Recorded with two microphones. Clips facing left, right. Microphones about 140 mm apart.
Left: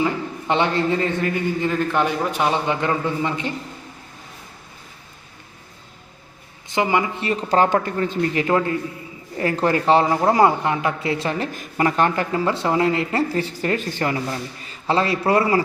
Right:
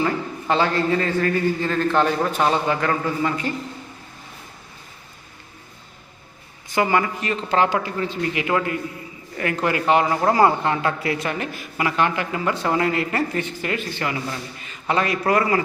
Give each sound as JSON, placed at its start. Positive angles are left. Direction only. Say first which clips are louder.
{"t": 0.0, "sound": "a man's voice", "louder": "left 1 dB", "side_deg": 20}
{"t": 6.7, "sound": "a man's voice", "louder": "even", "side_deg": 20}
{"t": 7.2, "sound": "speech", "louder": "left 2 dB", "side_deg": 35}
{"t": 10.2, "sound": "a woman's voice", "louder": "left 1 dB", "side_deg": 20}
{"t": 11.5, "sound": "speech", "louder": "left 3 dB", "side_deg": 40}
{"t": 14.6, "sound": "a sound", "louder": "left 2 dB", "side_deg": 30}
{"t": 15.3, "sound": "a woman's voice", "louder": "left 2 dB", "side_deg": 30}